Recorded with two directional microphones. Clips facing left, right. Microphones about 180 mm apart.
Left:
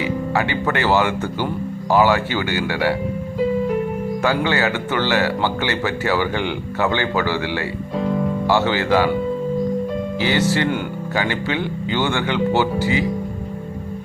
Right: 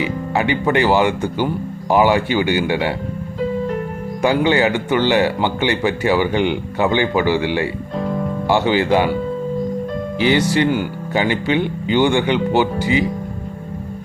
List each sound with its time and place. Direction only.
0.0 s speech: 15° right (ahead or behind)
4.2 s speech: 20° right (ahead or behind)
10.2 s speech: 15° right (ahead or behind)